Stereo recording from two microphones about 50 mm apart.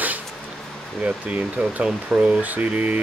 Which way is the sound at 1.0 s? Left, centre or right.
Right.